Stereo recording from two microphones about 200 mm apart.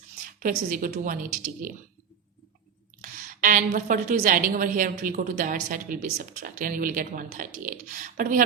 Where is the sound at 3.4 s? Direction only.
40° right (ahead or behind).